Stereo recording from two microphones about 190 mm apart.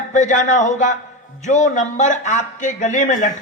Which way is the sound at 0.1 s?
40° left (ahead or behind).